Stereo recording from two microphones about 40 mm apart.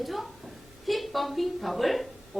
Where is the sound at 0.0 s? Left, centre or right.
Centre.